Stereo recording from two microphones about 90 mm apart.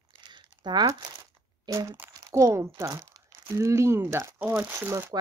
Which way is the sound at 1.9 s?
30° right (ahead or behind).